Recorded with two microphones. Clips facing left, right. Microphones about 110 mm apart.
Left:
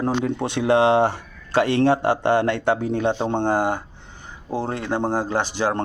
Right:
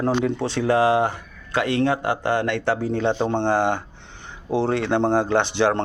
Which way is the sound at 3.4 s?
40° left (ahead or behind).